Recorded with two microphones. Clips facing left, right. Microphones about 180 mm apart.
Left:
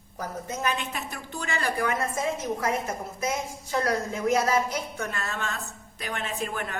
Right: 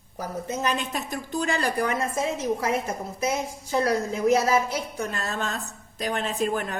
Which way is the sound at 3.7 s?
30° right (ahead or behind).